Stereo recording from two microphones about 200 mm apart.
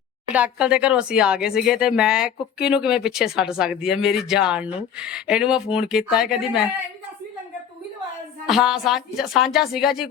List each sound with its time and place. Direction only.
0.3 s speech: 5° right (ahead or behind)
8.4 s speech: centre (ahead or behind)